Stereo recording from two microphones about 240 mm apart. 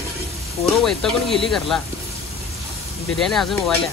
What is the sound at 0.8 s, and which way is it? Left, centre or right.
Speech, centre.